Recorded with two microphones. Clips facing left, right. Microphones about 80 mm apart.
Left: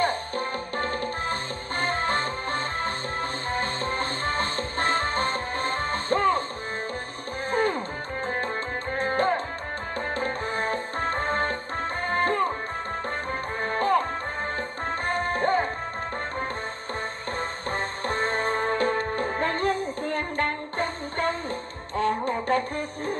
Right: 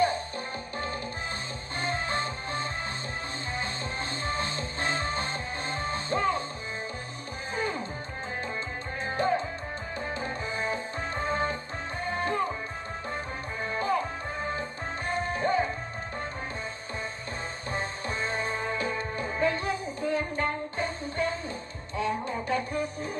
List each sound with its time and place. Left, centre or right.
0.0 s music: left
7.5 s music: left
9.0 s music: left
13.6 s music: left
17.7 s music: left